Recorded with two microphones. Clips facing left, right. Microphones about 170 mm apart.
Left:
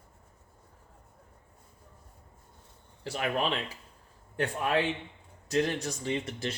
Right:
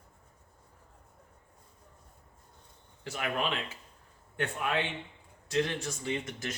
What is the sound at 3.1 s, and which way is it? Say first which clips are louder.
Speech: left 3 dB; 30° left (ahead or behind).